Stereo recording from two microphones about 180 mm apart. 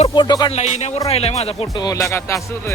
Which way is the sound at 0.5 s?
35° left (ahead or behind).